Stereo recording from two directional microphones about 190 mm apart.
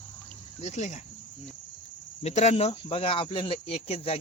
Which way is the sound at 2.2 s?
35° left (ahead or behind).